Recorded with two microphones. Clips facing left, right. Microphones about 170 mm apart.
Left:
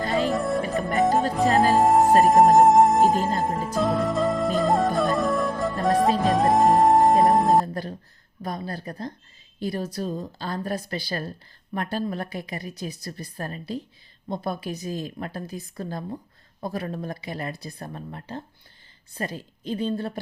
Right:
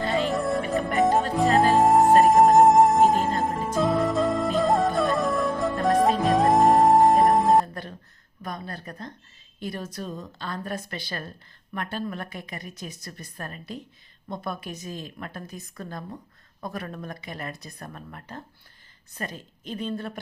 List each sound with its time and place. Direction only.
0.2 s music: centre (ahead or behind)
3.0 s music: 40° left (ahead or behind)
3.8 s music: centre (ahead or behind)
7.6 s music: 35° left (ahead or behind)
8.4 s a sound: 35° left (ahead or behind)
9.6 s a woman's voice: 35° left (ahead or behind)